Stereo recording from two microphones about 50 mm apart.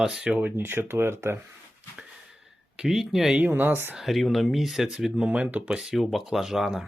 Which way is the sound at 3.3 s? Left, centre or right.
Right.